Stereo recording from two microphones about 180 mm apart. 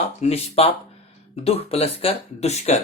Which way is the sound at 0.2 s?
35° left (ahead or behind).